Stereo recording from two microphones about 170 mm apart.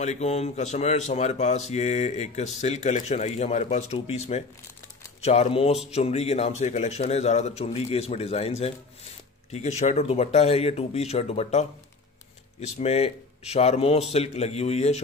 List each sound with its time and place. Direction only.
0.0 s speech: 40° left (ahead or behind)